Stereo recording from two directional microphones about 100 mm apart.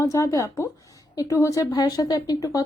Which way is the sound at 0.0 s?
30° left (ahead or behind).